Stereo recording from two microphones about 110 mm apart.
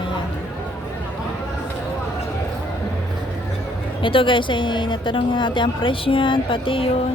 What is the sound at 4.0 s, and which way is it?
A woman's voice, 50° left (ahead or behind).